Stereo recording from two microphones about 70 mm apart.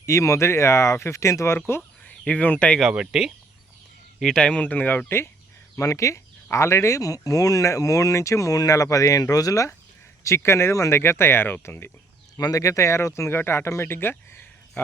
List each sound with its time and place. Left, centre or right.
0.0 s speech: left
2.0 s speech: centre
2.9 s speech: centre
4.2 s speech: centre; by 5.3 s left
5.7 s speech: left
10.2 s speech: left
12.4 s speech: left